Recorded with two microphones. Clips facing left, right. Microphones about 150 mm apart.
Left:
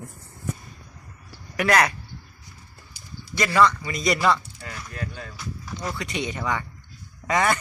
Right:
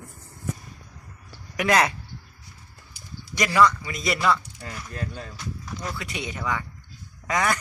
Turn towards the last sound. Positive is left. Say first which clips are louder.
# left 2 dB
turn(degrees=0)  # may be behind; listen again after turning